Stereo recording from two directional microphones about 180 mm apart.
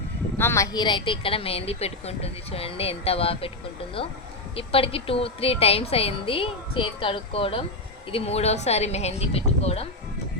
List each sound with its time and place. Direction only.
0.3 s a woman's voice: 15° left (ahead or behind); by 9.8 s 35° left (ahead or behind)